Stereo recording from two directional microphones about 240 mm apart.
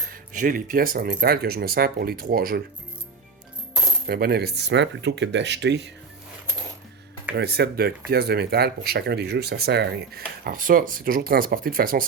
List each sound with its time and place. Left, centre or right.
0.1 s speech: right
4.0 s speech: right
7.3 s speech: right